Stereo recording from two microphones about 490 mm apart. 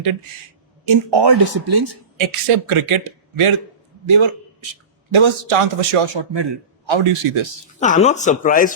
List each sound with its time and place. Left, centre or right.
0.9 s speech: right
2.2 s a man's voice: right
5.1 s a man's voice: right
7.8 s speech: centre